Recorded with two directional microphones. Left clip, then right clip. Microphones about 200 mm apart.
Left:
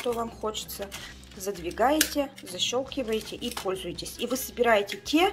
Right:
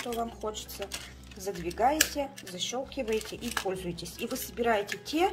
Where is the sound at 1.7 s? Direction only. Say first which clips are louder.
Left 2 dB; centre (ahead or behind).